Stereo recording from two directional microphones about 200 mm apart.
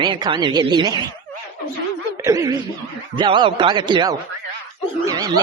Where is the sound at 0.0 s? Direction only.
25° right (ahead or behind).